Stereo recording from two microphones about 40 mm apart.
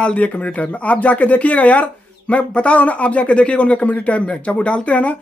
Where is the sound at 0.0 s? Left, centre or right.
Left.